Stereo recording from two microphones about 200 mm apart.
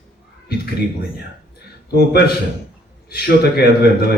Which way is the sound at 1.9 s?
50° left (ahead or behind).